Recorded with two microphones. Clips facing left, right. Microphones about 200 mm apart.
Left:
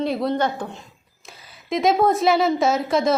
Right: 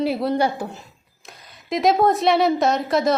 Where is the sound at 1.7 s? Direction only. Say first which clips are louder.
Even; centre (ahead or behind).